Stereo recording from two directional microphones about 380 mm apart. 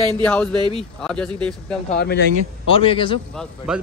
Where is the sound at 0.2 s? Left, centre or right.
Centre.